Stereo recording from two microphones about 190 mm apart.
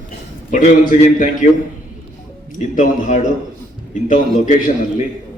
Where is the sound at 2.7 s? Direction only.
40° left (ahead or behind).